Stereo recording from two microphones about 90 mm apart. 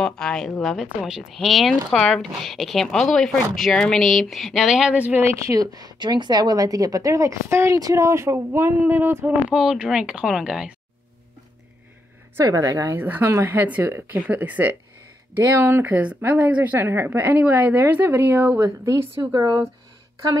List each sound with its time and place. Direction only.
0.0 s speech: 5° left (ahead or behind)
4.9 s speech: 20° right (ahead or behind)
5.5 s a woman's voice: 45° right (ahead or behind); by 9.3 s 25° right (ahead or behind)
9.5 s speech: 5° right (ahead or behind)
12.4 s a woman's voice: 30° right (ahead or behind)
13.0 s speech: 20° right (ahead or behind)
15.4 s a woman's voice: 30° right (ahead or behind)
15.8 s speech: 15° right (ahead or behind)
19.3 s speech: 50° right (ahead or behind)